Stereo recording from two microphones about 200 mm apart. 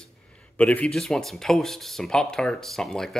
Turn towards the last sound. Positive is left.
turn(degrees=0)  # may be behind; listen again after turning